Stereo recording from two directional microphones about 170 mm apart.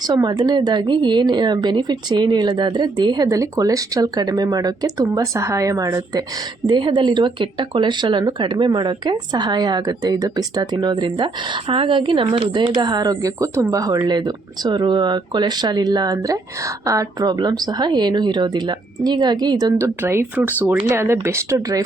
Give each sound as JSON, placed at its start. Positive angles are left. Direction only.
{"t": 0.1, "sound": "speech", "side_deg": -25}